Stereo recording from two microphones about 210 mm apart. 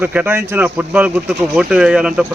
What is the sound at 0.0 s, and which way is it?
Speech, 10° right (ahead or behind).